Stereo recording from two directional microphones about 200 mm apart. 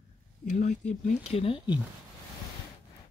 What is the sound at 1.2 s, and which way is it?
Speech, 30° left (ahead or behind).